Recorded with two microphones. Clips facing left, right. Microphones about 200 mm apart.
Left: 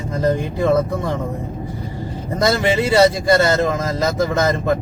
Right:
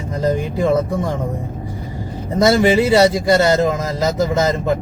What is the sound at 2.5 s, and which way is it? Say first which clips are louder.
Speech: right 1 dB; 15° right (ahead or behind).